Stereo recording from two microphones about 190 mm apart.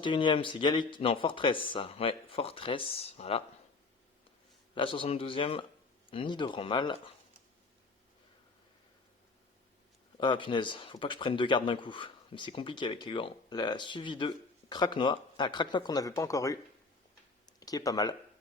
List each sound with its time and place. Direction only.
0.0 s speech: 25° left (ahead or behind)
4.7 s speech: 25° left (ahead or behind)
10.2 s speech: 25° left (ahead or behind)
17.4 s a sound: 20° left (ahead or behind)